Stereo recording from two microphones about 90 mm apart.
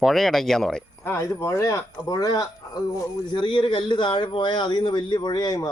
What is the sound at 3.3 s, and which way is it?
Speech, 60° left (ahead or behind).